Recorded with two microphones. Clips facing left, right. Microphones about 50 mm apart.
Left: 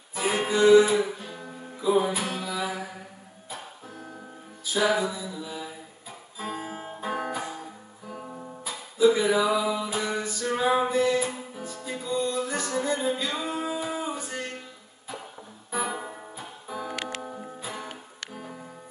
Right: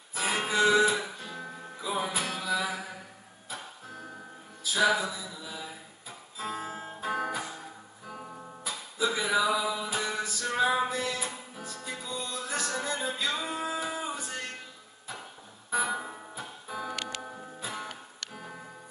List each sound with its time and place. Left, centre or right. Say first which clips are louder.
0.1 s music: left 3 dB; centre
0.9 s music: left 8 dB; left
1.8 s music: left 8 dB; centre
4.7 s mantra: left 2 dB; centre
6.3 s guitar: left 1 dB; centre
6.6 s music: left 2 dB; left
7.0 s music: left 1 dB; centre
8.1 s guitar: left 4 dB; centre
9.0 s a sound: left 9 dB; centre
9.4 s music: left 3 dB; centre
10.4 s music: left 3 dB; centre
15.7 s music: even; centre
16.9 s music: left 3 dB; left
17.2 s music: left 4 dB; centre